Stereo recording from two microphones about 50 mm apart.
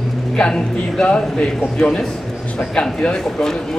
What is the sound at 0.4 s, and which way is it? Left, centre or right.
Speech, centre.